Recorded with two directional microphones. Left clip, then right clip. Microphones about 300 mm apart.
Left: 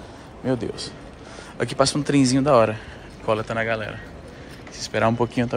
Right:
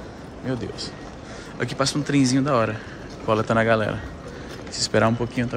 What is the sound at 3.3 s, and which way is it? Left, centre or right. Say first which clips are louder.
Speech: right 3 dB; centre.